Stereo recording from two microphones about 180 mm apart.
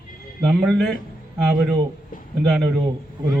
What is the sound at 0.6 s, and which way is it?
A man's voice, centre (ahead or behind).